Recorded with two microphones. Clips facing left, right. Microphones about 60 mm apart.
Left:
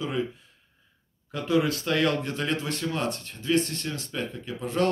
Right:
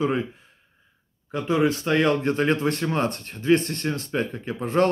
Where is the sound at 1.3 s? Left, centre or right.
Right.